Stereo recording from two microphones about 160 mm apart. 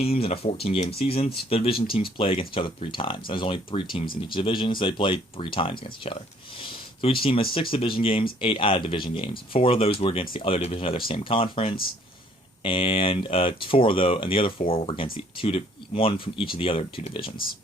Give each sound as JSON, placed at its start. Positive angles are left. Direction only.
{"t": 0.0, "sound": "speech", "side_deg": 40}